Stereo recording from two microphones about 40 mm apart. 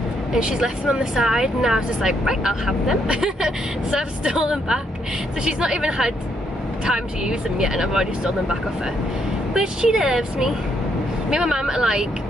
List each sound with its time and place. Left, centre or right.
0.3 s speech: centre
9.5 s speech: centre